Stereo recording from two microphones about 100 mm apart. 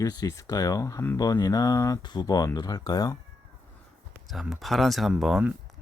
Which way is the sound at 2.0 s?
45° left (ahead or behind).